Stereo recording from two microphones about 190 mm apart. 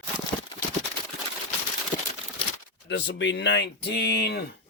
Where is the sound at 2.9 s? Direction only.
70° left (ahead or behind).